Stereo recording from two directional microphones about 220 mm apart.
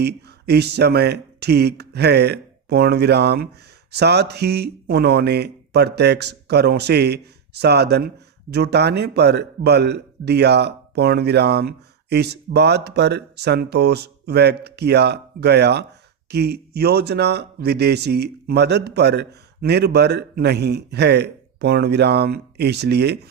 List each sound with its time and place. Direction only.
0.0 s speech: 50° right (ahead or behind)